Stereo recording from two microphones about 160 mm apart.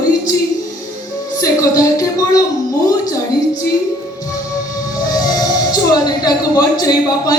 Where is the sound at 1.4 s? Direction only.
20° left (ahead or behind).